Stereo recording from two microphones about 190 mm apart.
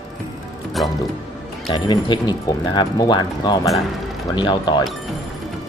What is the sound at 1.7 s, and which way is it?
Speech, 20° left (ahead or behind).